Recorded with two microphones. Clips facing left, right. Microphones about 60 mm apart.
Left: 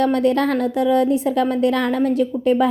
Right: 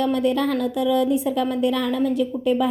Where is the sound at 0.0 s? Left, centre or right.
Left.